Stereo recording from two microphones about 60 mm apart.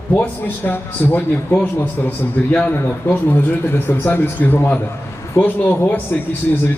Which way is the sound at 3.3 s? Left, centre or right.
Left.